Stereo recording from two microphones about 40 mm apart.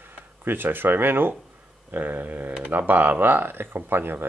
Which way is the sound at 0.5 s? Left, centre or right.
Right.